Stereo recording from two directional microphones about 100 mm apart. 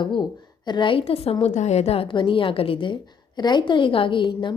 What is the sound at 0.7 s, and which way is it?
A woman's voice, 55° left (ahead or behind).